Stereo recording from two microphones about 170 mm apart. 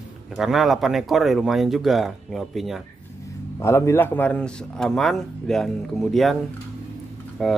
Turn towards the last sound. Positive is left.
turn(degrees=0)  # may be behind; listen again after turning